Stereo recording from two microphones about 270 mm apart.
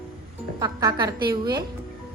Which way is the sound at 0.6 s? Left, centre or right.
Centre.